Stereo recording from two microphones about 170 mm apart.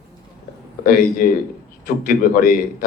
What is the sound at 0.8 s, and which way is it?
A man's voice, 55° left (ahead or behind).